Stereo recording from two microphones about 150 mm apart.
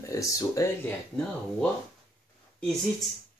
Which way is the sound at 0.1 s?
20° left (ahead or behind).